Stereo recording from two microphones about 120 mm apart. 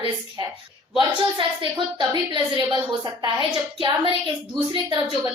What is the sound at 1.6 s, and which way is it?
A woman's voice, 40° right (ahead or behind).